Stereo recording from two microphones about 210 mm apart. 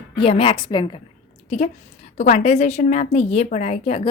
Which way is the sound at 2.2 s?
30° left (ahead or behind).